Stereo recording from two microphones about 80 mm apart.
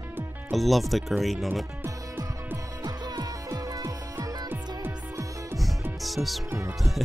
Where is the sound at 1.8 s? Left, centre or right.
Right.